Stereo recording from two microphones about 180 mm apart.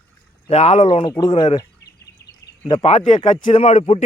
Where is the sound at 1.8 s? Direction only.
70° left (ahead or behind).